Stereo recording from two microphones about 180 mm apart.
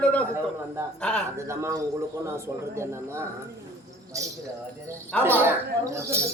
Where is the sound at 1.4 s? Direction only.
15° right (ahead or behind).